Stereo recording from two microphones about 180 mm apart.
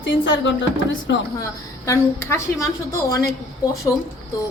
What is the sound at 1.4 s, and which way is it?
A woman's voice, 15° left (ahead or behind).